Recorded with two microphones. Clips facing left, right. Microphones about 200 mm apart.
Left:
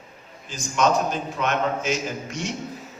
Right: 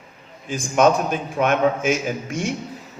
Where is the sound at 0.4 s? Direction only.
55° right (ahead or behind).